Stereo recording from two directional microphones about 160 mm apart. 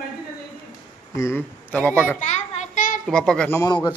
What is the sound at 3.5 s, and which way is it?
Speech, 25° left (ahead or behind).